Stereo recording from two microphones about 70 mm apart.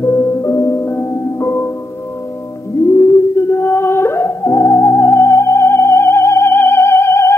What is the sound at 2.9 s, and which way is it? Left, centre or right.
Music, left.